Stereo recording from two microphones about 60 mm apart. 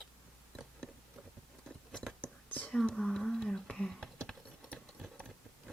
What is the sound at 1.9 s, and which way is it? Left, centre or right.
Whispering, centre.